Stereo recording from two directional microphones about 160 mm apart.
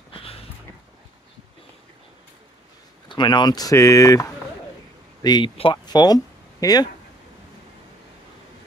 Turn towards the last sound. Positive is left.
turn(degrees=25)  # may be behind; listen again after turning